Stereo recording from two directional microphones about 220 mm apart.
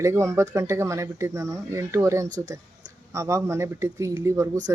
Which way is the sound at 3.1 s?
15° right (ahead or behind).